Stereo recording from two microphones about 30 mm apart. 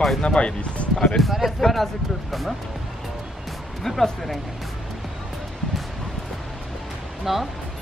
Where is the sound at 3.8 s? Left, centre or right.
Centre.